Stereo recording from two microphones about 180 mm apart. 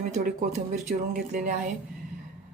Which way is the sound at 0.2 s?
45° right (ahead or behind).